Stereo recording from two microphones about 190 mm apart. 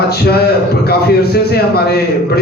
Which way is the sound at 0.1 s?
55° left (ahead or behind).